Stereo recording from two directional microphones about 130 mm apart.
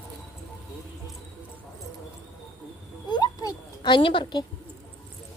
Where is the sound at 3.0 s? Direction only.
35° left (ahead or behind).